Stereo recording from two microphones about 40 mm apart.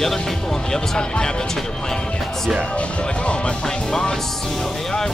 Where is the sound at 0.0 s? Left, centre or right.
Centre.